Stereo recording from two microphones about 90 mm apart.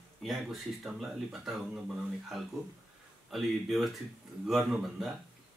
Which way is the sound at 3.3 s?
Centre (ahead or behind).